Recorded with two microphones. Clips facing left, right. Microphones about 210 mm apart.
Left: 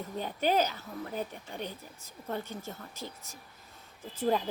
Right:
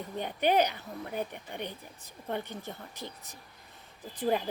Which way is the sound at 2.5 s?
15° right (ahead or behind).